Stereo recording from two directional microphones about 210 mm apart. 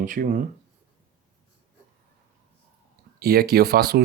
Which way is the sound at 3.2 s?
45° right (ahead or behind).